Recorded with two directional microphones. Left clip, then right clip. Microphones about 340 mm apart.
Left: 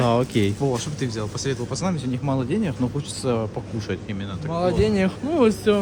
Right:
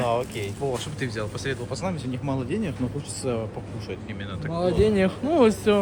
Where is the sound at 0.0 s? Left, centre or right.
Left.